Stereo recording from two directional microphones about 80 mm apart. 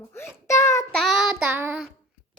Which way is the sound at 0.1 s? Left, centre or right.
Left.